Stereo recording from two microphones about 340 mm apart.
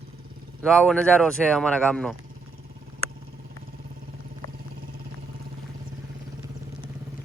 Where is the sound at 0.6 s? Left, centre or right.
Centre.